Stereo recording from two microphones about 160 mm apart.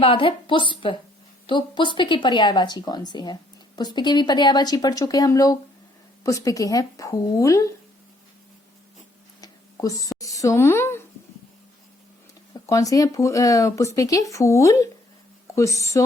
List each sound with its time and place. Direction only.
0.0 s a woman's voice: 35° left (ahead or behind)
9.4 s a sound: 20° left (ahead or behind)
10.2 s a woman's voice: 20° left (ahead or behind)
12.6 s speech: 20° left (ahead or behind)